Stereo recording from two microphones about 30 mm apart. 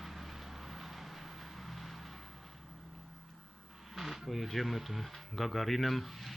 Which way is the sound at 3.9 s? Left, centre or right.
Centre.